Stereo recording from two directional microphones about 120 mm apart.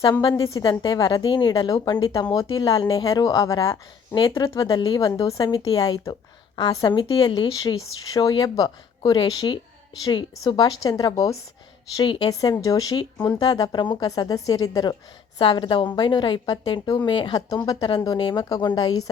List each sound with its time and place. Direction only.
0.0 s a woman's voice: 40° left (ahead or behind)
15.4 s a woman's voice: 45° left (ahead or behind)